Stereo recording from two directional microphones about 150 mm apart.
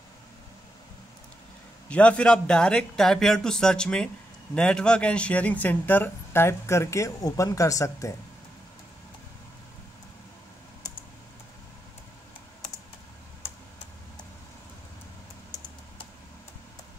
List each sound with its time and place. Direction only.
1.9 s speech: 10° left (ahead or behind)